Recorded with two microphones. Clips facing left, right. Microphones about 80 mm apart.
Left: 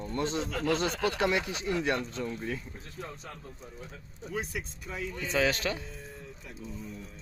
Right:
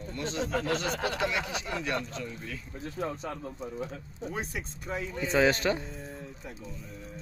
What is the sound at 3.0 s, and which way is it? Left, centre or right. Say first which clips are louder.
Speech: right 8 dB; right.